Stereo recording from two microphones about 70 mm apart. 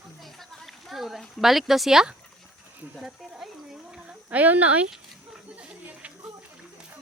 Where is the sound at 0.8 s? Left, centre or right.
Centre.